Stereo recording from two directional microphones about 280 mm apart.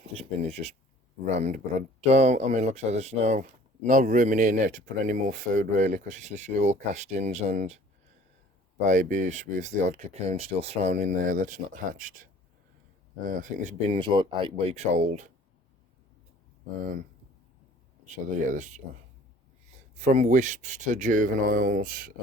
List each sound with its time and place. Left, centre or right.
0.0 s a sound: right
1.2 s speech: right
8.9 s speech: right
18.0 s speech: right
20.0 s speech: right